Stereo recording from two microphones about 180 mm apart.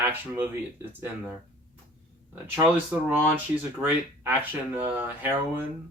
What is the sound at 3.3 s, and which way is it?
Speech, 10° right (ahead or behind).